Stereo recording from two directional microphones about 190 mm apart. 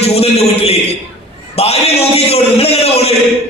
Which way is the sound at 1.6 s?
30° left (ahead or behind).